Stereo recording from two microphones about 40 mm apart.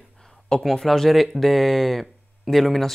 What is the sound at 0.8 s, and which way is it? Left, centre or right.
Speech, centre.